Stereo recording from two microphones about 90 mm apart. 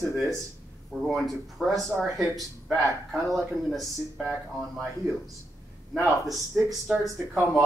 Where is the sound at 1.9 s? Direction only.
20° right (ahead or behind).